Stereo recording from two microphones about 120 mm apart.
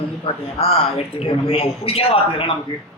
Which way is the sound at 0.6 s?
55° left (ahead or behind).